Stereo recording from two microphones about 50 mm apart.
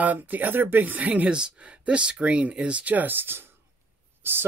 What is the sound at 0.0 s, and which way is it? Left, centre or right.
Speech, right.